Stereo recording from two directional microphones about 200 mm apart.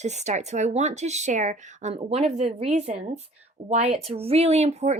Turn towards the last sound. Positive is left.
turn(degrees=-35)  # may be behind; listen again after turning